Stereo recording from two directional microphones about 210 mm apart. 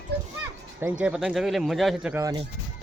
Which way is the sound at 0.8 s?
5° right (ahead or behind).